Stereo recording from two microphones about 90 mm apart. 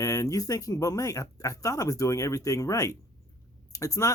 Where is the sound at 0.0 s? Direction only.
40° left (ahead or behind).